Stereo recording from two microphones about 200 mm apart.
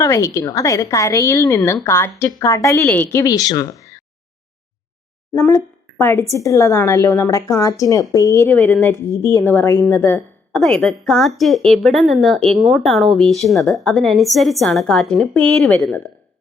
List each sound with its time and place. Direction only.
0.0 s a woman's voice: 15° left (ahead or behind)
5.3 s a woman's voice: 15° left (ahead or behind)